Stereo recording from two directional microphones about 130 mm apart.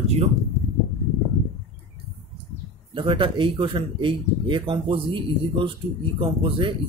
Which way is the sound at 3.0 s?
40° right (ahead or behind).